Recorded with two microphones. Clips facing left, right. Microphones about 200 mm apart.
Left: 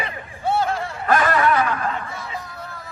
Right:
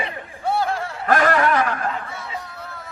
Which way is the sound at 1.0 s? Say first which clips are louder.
Right 1 dB; 45° right (ahead or behind).